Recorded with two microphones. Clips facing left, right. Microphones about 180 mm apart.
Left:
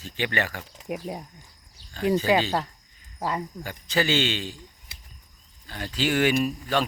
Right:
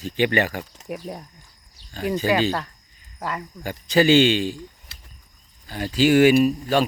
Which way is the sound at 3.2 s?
15° left (ahead or behind).